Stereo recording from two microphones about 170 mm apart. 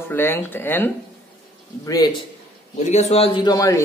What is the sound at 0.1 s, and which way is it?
Speech, 15° left (ahead or behind).